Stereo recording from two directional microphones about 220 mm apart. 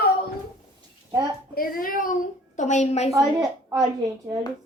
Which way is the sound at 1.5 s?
40° left (ahead or behind).